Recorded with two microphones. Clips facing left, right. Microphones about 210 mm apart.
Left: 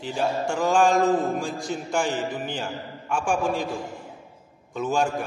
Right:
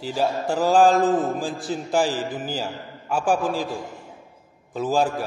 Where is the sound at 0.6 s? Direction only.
35° right (ahead or behind).